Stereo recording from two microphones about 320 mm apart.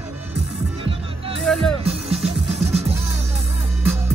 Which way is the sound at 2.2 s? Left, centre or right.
Centre.